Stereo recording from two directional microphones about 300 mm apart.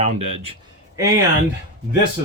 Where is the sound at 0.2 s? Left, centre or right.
Right.